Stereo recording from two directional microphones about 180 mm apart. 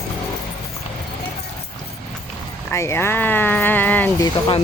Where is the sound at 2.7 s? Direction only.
15° left (ahead or behind).